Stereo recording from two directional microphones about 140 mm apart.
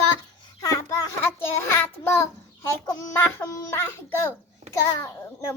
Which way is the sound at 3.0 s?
20° left (ahead or behind).